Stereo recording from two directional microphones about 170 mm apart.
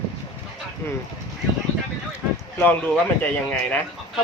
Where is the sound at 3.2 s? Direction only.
5° left (ahead or behind).